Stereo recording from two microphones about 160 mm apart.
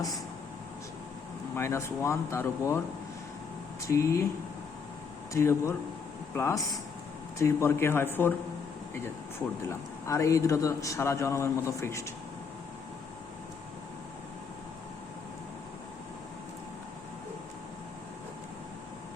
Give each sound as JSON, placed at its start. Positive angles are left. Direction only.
{"t": 1.5, "sound": "speech", "side_deg": 15}
{"t": 3.8, "sound": "a man's voice", "side_deg": 20}
{"t": 5.3, "sound": "speech", "side_deg": 15}
{"t": 10.1, "sound": "a man's voice", "side_deg": 20}